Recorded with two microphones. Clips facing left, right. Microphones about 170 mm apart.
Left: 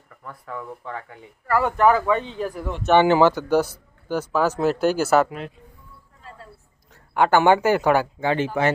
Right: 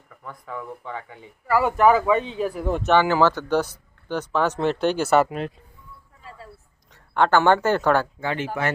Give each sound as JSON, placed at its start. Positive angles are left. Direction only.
{"t": 0.2, "sound": "speech", "side_deg": 0}
{"t": 2.9, "sound": "speech", "side_deg": 20}
{"t": 6.9, "sound": "speech", "side_deg": 10}
{"t": 8.2, "sound": "speech", "side_deg": 30}